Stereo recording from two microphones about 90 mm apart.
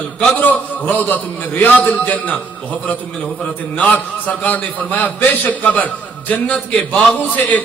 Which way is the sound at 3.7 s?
15° left (ahead or behind).